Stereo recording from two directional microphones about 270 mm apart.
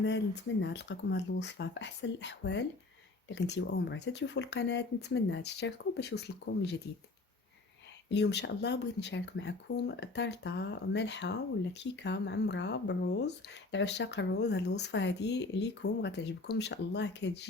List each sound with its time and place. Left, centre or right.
0.6 s speech: left
8.1 s speech: left